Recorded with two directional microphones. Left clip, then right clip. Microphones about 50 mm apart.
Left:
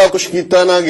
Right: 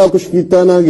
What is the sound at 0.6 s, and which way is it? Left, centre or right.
Speech, left.